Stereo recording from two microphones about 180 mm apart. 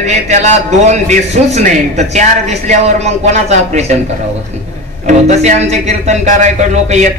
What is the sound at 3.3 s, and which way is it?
Speech, 40° right (ahead or behind).